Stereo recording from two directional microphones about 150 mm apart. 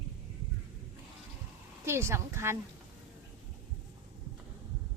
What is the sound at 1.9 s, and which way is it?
Speech, 20° right (ahead or behind).